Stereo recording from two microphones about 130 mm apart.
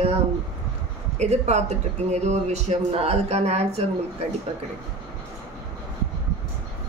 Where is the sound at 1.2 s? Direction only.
60° right (ahead or behind).